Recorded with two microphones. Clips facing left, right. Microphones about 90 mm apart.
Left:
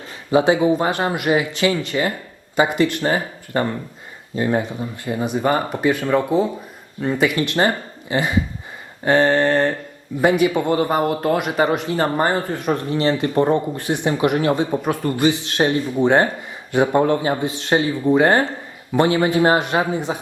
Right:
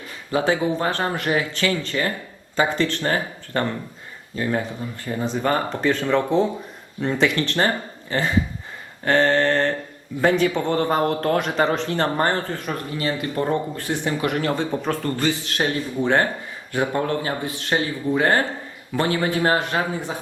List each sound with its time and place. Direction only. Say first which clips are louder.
0.3 s a man's voice: left 6 dB; 15° left (ahead or behind)
12.5 s speech: left 7 dB; 25° left (ahead or behind)